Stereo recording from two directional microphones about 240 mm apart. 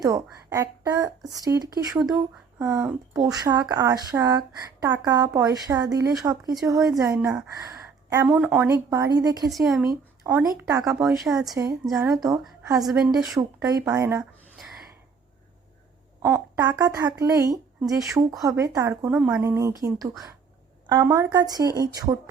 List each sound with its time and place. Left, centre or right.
0.0 s speech: centre
9.5 s speech: centre
11.0 s speech: centre
11.5 s a woman's voice: centre
16.2 s speech: centre
20.8 s speech: centre